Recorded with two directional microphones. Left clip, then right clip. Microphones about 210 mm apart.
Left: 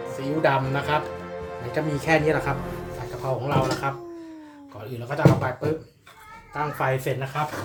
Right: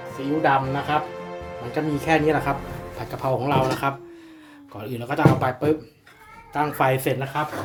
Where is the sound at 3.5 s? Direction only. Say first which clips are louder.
Right 2 dB; 35° right (ahead or behind).